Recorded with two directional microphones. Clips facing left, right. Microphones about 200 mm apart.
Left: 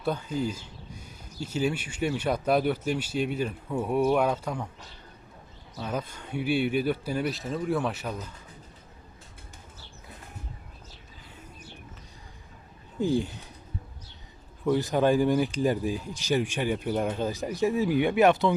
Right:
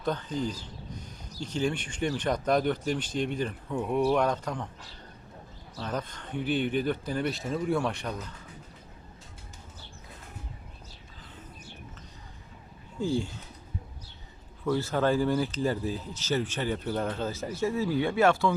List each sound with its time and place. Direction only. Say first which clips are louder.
0.0 s speech: left 2 dB; 10° left (ahead or behind)
0.6 s a sound: right 3 dB; 10° left (ahead or behind)
1.4 s speech: left 1 dB; 5° left (ahead or behind)
5.8 s speech: left 1 dB; 10° left (ahead or behind)
13.0 s speech: left 3 dB; 15° left (ahead or behind)
14.6 s speech: left 3 dB; 15° left (ahead or behind)